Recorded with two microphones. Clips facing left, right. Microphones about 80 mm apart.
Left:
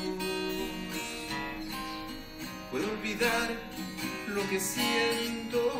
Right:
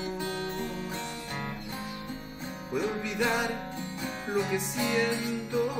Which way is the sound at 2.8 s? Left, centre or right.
Centre.